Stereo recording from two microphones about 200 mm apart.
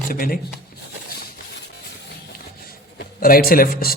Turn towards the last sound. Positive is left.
turn(degrees=50)  # may be behind; listen again after turning